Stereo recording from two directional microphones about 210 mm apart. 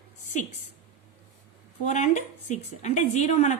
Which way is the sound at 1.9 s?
30° left (ahead or behind).